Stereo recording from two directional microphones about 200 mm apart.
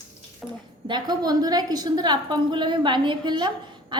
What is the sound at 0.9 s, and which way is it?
A woman's voice, 20° right (ahead or behind).